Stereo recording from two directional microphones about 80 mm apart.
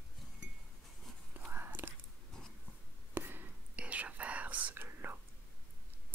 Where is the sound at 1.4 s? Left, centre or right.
Right.